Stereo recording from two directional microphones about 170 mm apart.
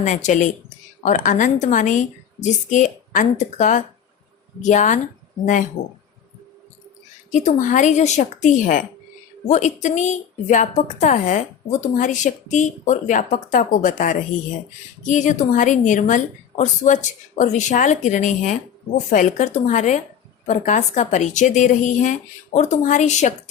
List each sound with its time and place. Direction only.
0.0 s a woman's voice: 45° left (ahead or behind)
7.3 s a woman's voice: 45° left (ahead or behind)